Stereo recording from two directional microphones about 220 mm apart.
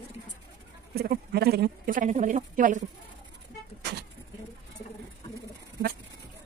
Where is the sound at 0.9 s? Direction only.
45° right (ahead or behind).